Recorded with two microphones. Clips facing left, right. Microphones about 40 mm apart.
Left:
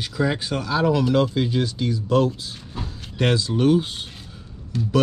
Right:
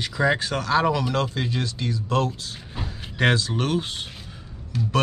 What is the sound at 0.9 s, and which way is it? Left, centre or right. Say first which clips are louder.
Speech: left 5 dB; centre.